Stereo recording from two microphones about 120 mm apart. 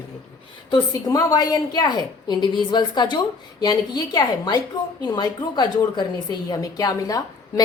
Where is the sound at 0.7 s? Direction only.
35° left (ahead or behind).